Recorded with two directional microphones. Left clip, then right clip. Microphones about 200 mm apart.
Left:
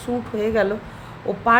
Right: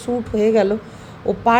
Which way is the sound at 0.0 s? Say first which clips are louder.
Right 5 dB; 15° right (ahead or behind).